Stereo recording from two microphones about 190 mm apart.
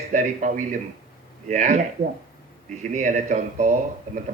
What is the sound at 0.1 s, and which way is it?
A man's voice, 40° right (ahead or behind).